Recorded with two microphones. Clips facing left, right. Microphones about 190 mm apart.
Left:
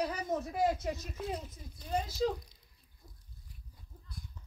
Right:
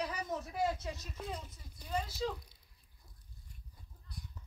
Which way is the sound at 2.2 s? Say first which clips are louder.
Left 7 dB; 45° left (ahead or behind).